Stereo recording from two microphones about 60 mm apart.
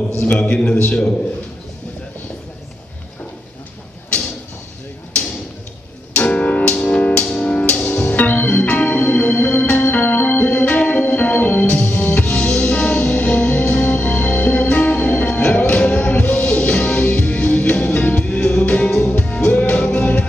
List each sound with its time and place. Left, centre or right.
0.2 s a man's voice: left
6.1 s music: centre
8.2 s music: left
10.4 s music: left
12.3 s music: centre